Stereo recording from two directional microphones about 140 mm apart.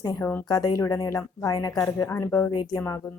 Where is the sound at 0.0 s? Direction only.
25° left (ahead or behind).